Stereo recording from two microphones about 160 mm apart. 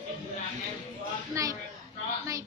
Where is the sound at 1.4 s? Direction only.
20° right (ahead or behind).